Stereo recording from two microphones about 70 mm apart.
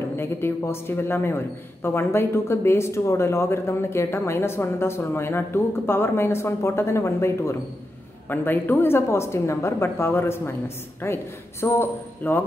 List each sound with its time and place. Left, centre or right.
0.2 s a man's voice: left
8.3 s a man's voice: left